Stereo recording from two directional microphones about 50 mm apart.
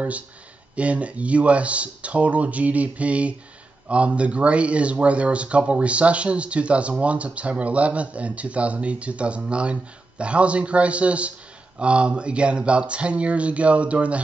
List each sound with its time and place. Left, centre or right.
0.7 s speech: right